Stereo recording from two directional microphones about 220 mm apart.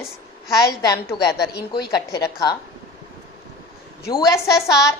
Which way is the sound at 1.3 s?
45° left (ahead or behind).